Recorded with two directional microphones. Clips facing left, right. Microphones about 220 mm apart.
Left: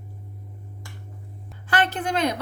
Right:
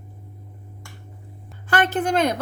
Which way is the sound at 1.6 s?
45° right (ahead or behind).